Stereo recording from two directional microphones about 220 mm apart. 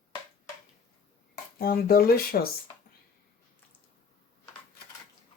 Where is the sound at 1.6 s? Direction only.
40° left (ahead or behind).